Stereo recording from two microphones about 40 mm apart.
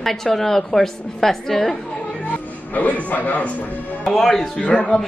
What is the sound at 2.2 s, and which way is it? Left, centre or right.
Speech, left.